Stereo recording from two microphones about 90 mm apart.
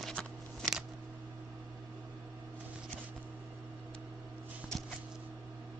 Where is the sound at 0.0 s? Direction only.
5° left (ahead or behind).